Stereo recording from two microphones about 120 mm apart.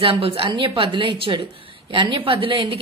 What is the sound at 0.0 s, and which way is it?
A woman's voice, 50° right (ahead or behind).